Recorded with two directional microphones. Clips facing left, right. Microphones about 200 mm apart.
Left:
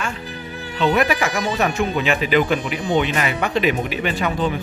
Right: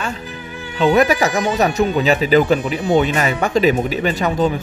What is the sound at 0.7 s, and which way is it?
Speech, 40° right (ahead or behind).